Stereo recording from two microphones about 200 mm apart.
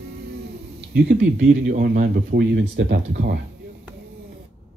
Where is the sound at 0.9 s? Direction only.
60° right (ahead or behind).